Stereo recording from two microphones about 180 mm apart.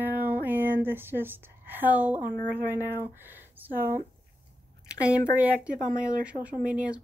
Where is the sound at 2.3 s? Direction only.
50° right (ahead or behind).